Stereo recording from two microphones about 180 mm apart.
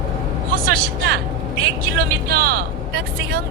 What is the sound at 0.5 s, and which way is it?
Vehicle, 55° right (ahead or behind).